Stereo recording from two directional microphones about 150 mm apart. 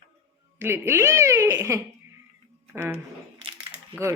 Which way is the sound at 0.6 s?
15° right (ahead or behind).